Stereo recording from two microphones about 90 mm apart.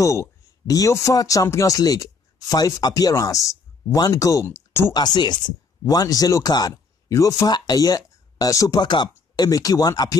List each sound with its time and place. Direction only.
0.0 s a sound: 35° left (ahead or behind)
0.7 s speech: 35° left (ahead or behind)
4.9 s speech: 50° left (ahead or behind)